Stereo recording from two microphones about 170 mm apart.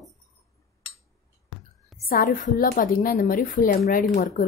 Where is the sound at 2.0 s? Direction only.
60° left (ahead or behind).